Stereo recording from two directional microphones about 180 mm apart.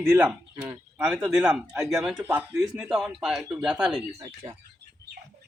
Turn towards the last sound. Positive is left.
turn(degrees=-30)  # may be behind; listen again after turning